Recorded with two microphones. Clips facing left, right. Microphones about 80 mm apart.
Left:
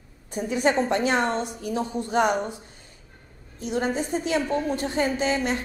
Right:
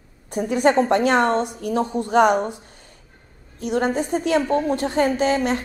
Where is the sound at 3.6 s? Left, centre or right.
Right.